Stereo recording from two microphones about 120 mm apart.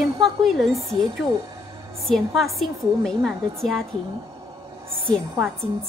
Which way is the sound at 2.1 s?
Centre (ahead or behind).